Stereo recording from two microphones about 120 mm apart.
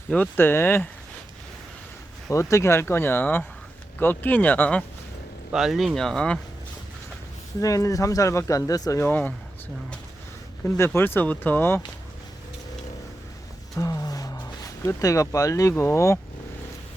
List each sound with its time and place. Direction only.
0.1 s speech: 15° left (ahead or behind)
2.3 s speech: 25° left (ahead or behind)
5.5 s speech: 5° right (ahead or behind)
7.6 s speech: 30° left (ahead or behind)
10.8 s speech: 20° left (ahead or behind)
13.7 s speech: 30° left (ahead or behind)